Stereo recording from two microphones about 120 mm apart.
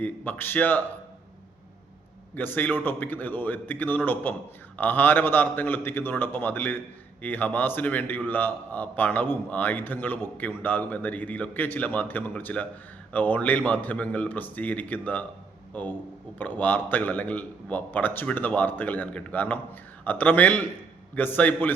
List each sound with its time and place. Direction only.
0.0 s a man's voice: 15° left (ahead or behind)
2.3 s a man's voice: 15° left (ahead or behind)